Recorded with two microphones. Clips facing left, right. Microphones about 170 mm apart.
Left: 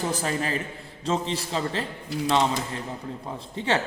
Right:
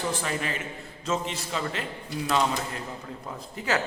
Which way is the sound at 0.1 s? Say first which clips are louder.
Left 3 dB; 40° left (ahead or behind).